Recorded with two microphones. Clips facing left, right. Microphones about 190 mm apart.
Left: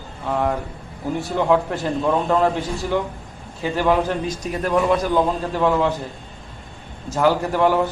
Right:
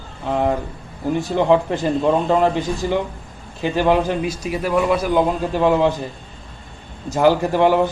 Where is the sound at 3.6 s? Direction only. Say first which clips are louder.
Right 2 dB; 15° right (ahead or behind).